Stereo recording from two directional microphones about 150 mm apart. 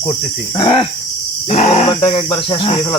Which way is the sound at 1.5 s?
45° left (ahead or behind).